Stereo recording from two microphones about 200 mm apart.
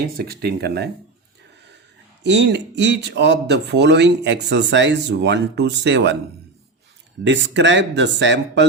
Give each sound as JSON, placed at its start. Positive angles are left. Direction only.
{"t": 0.0, "sound": "speech", "side_deg": -50}
{"t": 2.2, "sound": "speech", "side_deg": -60}
{"t": 7.3, "sound": "speech", "side_deg": -60}